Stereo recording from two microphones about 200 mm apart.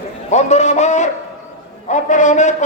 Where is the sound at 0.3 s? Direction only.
35° left (ahead or behind).